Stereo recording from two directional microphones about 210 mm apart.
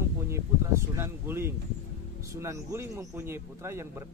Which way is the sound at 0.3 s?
10° right (ahead or behind).